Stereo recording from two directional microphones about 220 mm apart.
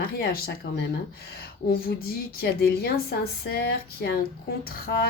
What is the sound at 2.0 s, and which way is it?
Speech, 45° left (ahead or behind).